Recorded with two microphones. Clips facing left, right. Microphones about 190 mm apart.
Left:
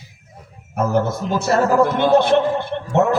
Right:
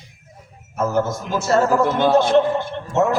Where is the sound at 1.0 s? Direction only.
60° left (ahead or behind).